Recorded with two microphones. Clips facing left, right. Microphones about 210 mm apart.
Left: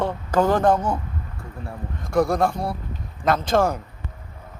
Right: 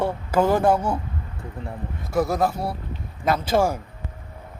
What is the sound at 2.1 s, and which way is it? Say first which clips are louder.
Speech: left 2 dB; 5° right (ahead or behind).